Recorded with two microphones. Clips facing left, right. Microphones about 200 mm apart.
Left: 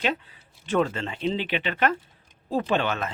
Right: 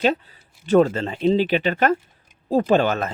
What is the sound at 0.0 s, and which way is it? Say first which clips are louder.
Speech: right 7 dB; 40° right (ahead or behind).